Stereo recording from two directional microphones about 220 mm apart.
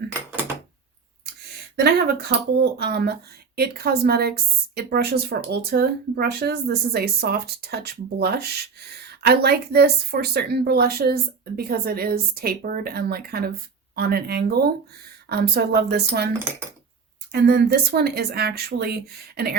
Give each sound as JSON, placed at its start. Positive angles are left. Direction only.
{"t": 1.7, "sound": "speech", "side_deg": -50}
{"t": 17.3, "sound": "speech", "side_deg": -50}